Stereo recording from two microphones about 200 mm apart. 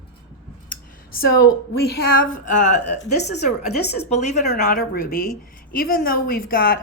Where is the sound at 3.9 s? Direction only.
35° left (ahead or behind).